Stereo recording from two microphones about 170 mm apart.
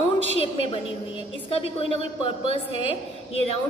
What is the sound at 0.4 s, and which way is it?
A woman's voice, 35° left (ahead or behind).